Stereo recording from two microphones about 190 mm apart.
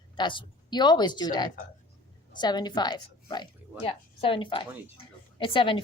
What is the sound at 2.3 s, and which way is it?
A woman's voice, 20° left (ahead or behind).